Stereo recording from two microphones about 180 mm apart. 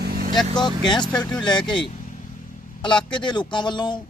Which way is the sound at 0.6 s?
25° left (ahead or behind).